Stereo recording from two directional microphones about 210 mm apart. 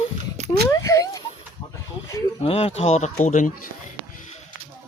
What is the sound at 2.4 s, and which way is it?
Speech, 30° left (ahead or behind).